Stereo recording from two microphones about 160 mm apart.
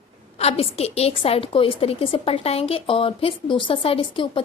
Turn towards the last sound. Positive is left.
turn(degrees=35)  # may be behind; listen again after turning